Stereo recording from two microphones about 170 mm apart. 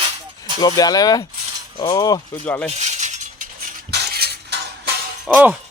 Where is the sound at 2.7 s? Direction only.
45° right (ahead or behind); by 4.6 s 80° right.